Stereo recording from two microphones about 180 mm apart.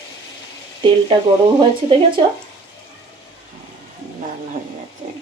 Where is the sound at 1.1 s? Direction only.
25° right (ahead or behind).